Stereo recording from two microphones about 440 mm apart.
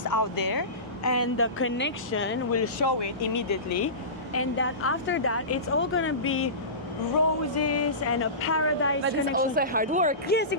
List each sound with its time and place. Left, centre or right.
0.0 s speech: left
1.0 s a woman's voice: left
3.3 s a sound: left
4.4 s a woman's voice: left
7.6 s a sound: left
9.0 s speech: centre
10.2 s a woman's voice: left